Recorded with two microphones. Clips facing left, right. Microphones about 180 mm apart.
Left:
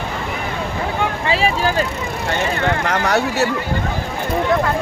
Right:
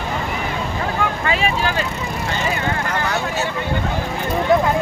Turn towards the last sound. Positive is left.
turn(degrees=70)  # may be behind; listen again after turning